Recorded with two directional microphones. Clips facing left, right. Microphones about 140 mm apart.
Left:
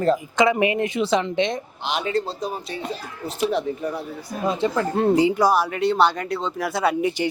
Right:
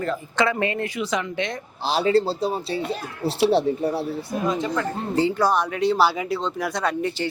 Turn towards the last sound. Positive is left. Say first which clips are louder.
# left 3 dB
turn(degrees=15)  # may be behind; listen again after turning